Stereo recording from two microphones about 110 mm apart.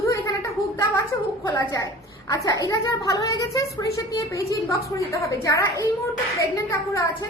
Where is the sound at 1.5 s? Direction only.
30° left (ahead or behind).